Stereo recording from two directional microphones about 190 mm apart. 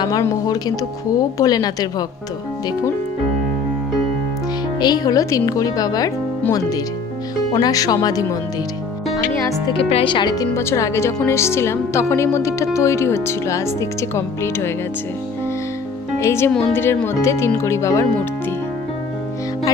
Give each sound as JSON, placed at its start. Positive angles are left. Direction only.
{"t": 0.0, "sound": "speech", "side_deg": 20}
{"t": 4.7, "sound": "speech", "side_deg": 20}
{"t": 9.5, "sound": "speech", "side_deg": 25}
{"t": 16.2, "sound": "speech", "side_deg": 15}